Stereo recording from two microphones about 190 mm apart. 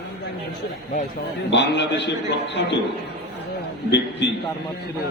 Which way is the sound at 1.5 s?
65° left (ahead or behind).